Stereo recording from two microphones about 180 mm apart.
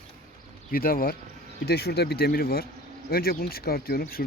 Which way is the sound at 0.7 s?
55° left (ahead or behind).